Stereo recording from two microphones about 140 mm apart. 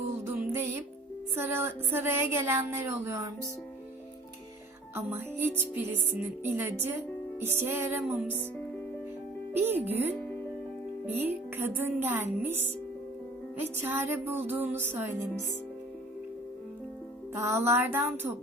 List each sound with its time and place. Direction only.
1.4 s speech: 15° right (ahead or behind)
4.9 s speech: 15° right (ahead or behind)
9.5 s speech: 15° right (ahead or behind)
17.3 s speech: 20° right (ahead or behind)